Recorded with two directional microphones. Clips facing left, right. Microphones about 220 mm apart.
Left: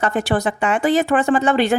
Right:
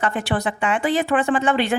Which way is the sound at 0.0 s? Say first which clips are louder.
Left 4 dB; 40° left (ahead or behind).